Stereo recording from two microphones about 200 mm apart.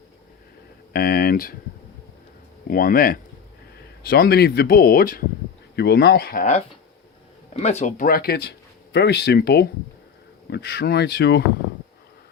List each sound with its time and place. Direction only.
0.9 s speech: 50° left (ahead or behind)
2.6 s speech: 45° left (ahead or behind)